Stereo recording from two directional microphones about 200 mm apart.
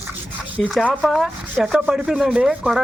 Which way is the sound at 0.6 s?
5° left (ahead or behind).